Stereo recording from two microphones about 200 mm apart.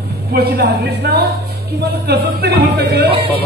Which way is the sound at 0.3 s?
50° right (ahead or behind).